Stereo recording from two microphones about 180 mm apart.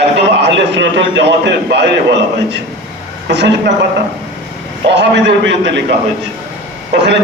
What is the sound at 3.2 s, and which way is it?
Speech, 70° right (ahead or behind).